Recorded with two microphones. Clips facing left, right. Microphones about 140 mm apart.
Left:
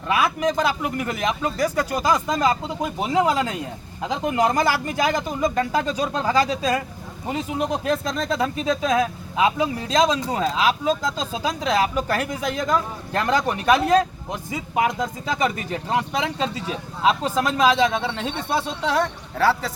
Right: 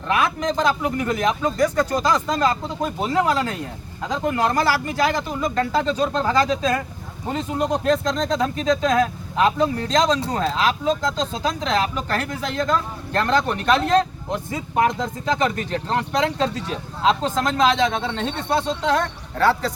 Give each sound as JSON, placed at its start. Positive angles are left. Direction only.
{"t": 0.1, "sound": "speech", "side_deg": 5}